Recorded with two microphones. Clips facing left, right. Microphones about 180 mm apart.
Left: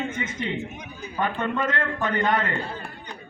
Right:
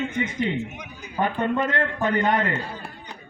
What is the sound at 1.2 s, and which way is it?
A man's voice, 35° right (ahead or behind).